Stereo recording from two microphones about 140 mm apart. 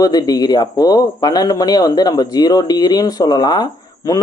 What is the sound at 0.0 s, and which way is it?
Speech, 25° left (ahead or behind).